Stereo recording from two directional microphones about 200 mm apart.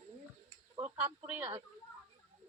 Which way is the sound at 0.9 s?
10° right (ahead or behind).